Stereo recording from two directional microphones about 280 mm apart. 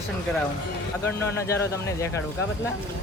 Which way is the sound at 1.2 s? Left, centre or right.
Centre.